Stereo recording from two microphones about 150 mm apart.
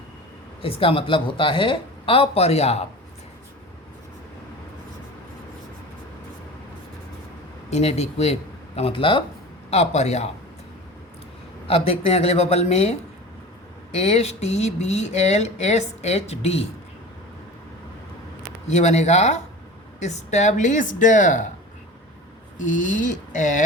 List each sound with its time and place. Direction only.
0.6 s speech: 40° left (ahead or behind)
7.7 s speech: 45° left (ahead or behind)
9.6 s speech: 45° left (ahead or behind)
11.7 s speech: 45° left (ahead or behind)
18.7 s speech: 50° left (ahead or behind)
22.5 s speech: 55° left (ahead or behind)